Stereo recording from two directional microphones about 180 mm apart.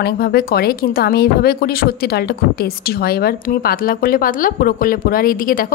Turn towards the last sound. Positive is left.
turn(degrees=50)  # may be behind; listen again after turning